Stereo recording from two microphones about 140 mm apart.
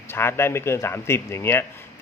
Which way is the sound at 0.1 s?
15° left (ahead or behind).